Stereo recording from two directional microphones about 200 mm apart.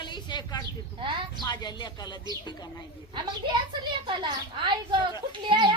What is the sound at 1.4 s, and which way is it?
Speech, 20° left (ahead or behind).